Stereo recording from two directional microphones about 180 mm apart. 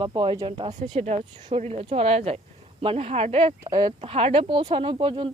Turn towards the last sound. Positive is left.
turn(degrees=-30)  # may be behind; listen again after turning